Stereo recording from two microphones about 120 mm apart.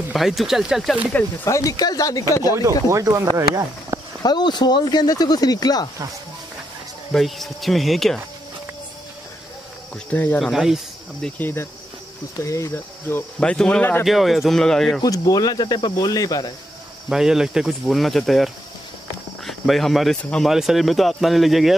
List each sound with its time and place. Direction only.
0.1 s speech: centre (ahead or behind)
1.4 s speech: 25° left (ahead or behind)
2.9 s speech: 30° right (ahead or behind)
4.2 s speech: 35° left (ahead or behind)
7.1 s speech: centre (ahead or behind)
10.1 s speech: 15° left (ahead or behind)
10.4 s speech: 5° right (ahead or behind)
11.2 s speech: 15° left (ahead or behind)
12.4 s speech: 25° left (ahead or behind)
13.4 s speech: 10° left (ahead or behind)
14.0 s speech: centre (ahead or behind)
15.0 s speech: 30° left (ahead or behind)
17.1 s speech: 5° right (ahead or behind)